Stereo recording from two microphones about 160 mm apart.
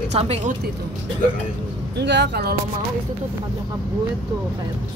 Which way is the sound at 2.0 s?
90° right.